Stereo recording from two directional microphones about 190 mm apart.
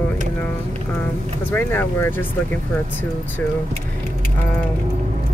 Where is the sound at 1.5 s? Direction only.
10° left (ahead or behind).